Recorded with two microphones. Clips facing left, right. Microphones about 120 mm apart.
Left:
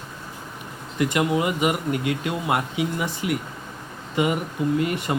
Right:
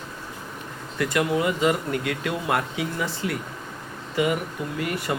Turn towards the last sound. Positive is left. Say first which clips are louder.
# left 5 dB
turn(degrees=20)  # may be behind; listen again after turning